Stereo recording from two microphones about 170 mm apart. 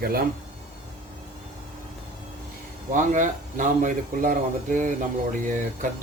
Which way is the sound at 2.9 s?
50° right (ahead or behind).